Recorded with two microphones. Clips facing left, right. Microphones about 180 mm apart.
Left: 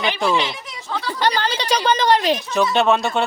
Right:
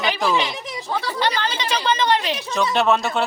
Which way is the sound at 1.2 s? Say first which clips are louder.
Left 6 dB; 40° left (ahead or behind).